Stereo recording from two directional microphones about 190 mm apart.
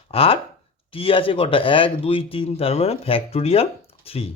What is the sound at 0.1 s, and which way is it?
Speech, 30° left (ahead or behind).